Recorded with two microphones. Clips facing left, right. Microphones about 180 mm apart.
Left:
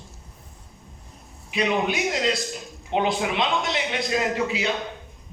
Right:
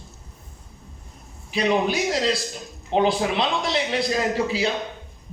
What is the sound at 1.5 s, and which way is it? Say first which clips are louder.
A man's voice: right 2 dB; 35° right (ahead or behind).